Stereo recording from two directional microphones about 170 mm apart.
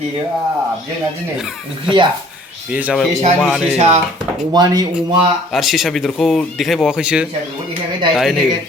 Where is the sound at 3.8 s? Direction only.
40° right (ahead or behind).